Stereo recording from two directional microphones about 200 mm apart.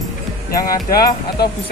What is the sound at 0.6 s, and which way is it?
Speech, 45° left (ahead or behind).